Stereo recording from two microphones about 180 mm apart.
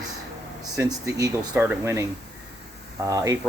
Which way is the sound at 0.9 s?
20° right (ahead or behind).